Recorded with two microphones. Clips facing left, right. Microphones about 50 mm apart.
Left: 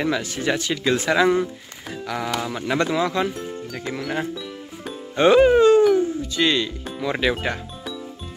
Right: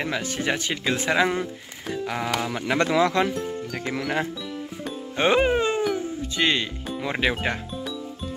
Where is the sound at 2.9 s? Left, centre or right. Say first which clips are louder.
Right 1 dB; right.